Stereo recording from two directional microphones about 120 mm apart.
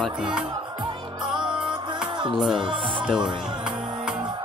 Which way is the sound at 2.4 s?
5° right (ahead or behind).